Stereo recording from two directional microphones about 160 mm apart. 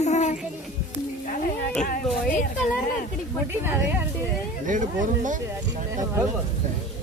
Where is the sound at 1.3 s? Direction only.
60° left (ahead or behind).